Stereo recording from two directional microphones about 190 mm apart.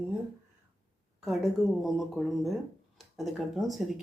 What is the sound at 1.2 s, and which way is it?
Speech, centre (ahead or behind).